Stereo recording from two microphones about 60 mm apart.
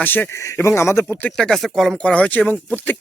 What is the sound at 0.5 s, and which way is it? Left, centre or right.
Speech, left.